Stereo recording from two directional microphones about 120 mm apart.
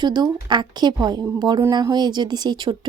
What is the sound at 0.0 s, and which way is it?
Speech, 40° right (ahead or behind).